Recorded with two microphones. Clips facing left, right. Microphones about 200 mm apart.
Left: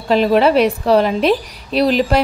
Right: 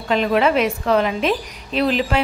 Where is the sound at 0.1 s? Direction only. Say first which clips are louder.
Left 5 dB; 35° left (ahead or behind).